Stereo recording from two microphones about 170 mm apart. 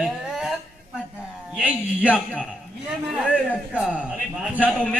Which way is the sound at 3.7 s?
5° right (ahead or behind).